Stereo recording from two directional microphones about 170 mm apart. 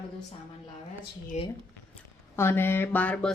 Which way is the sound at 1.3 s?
45° left (ahead or behind).